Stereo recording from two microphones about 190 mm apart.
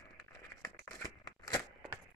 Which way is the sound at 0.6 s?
15° left (ahead or behind).